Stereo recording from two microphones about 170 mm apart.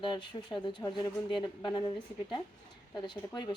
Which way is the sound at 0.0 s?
25° left (ahead or behind).